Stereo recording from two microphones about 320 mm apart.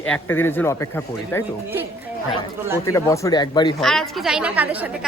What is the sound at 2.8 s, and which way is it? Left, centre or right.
Speech, centre.